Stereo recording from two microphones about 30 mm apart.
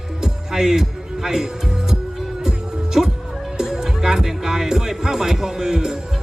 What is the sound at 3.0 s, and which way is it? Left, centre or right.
Music, centre.